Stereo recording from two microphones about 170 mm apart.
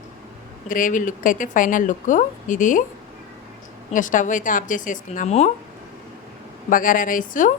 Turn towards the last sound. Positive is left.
turn(degrees=50)  # may be behind; listen again after turning